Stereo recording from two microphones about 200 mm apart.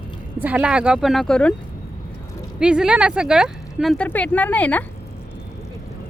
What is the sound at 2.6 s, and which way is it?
Speech, 5° right (ahead or behind).